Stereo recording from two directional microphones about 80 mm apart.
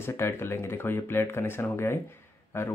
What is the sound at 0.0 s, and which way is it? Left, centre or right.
Speech, left.